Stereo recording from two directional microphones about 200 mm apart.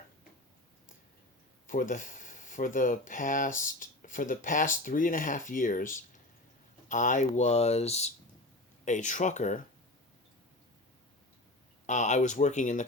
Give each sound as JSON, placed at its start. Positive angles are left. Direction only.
{"t": 1.6, "sound": "speech", "side_deg": 40}
{"t": 11.9, "sound": "speech", "side_deg": 35}